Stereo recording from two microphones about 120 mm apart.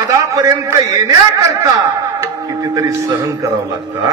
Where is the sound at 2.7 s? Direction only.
25° right (ahead or behind).